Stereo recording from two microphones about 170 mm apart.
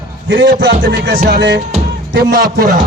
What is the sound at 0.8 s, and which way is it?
Music, 80° right.